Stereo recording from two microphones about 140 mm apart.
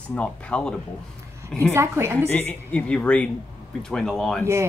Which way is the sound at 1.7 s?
20° right (ahead or behind).